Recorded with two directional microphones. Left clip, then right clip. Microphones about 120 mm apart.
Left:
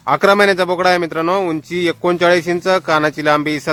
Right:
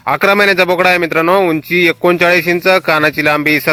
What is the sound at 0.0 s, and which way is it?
A man's voice, 25° right (ahead or behind).